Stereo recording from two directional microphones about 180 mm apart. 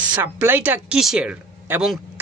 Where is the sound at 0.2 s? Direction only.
10° right (ahead or behind).